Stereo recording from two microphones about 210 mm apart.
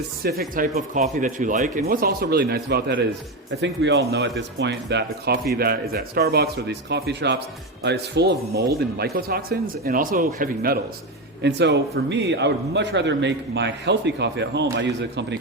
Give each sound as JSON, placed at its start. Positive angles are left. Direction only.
{"t": 0.2, "sound": "speech", "side_deg": -45}
{"t": 4.1, "sound": "speech", "side_deg": -55}
{"t": 11.4, "sound": "a man's voice", "side_deg": -55}